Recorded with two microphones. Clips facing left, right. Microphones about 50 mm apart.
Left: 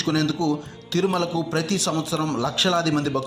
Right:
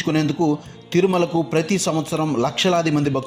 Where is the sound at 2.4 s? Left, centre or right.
Right.